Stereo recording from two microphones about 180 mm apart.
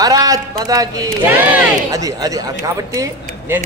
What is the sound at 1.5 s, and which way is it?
Speech, 10° right (ahead or behind).